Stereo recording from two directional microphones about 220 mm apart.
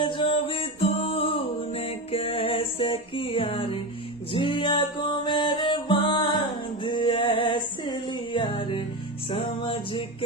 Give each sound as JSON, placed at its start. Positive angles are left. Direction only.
{"t": 0.0, "sound": "music", "side_deg": 25}